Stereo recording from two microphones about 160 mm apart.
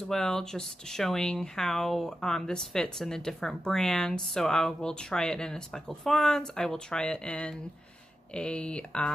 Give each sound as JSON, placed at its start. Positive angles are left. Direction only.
{"t": 0.0, "sound": "speech", "side_deg": 5}